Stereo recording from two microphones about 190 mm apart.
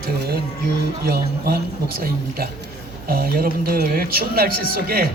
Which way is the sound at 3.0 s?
50° right (ahead or behind).